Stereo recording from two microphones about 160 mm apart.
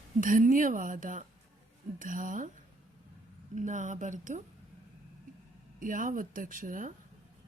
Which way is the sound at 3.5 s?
50° right (ahead or behind).